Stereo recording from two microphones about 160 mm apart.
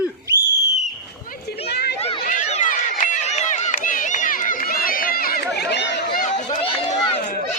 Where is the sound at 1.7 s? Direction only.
90° left.